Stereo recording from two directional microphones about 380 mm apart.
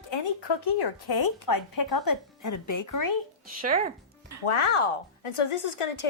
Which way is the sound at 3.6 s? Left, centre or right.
Right.